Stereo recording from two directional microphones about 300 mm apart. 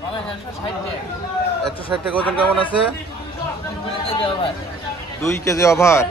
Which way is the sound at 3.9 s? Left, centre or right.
Centre.